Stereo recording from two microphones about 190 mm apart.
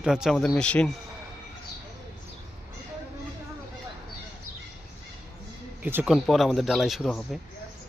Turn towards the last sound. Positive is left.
turn(degrees=0)  # may be behind; listen again after turning